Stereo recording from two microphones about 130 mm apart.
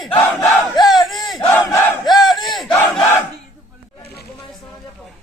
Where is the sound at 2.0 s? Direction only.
Centre (ahead or behind).